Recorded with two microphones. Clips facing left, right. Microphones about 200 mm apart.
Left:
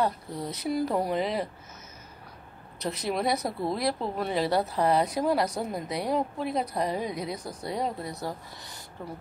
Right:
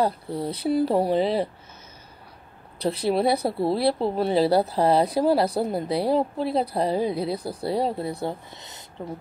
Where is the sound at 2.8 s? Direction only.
30° right (ahead or behind).